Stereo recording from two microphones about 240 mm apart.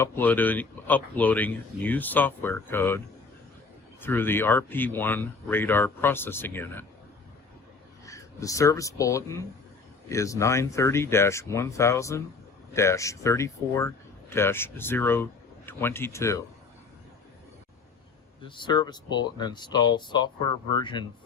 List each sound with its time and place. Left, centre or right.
0.0 s speech: centre
4.0 s speech: centre
8.0 s speech: centre
18.4 s speech: centre